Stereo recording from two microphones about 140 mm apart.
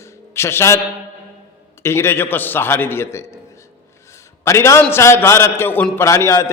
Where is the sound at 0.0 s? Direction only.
20° left (ahead or behind).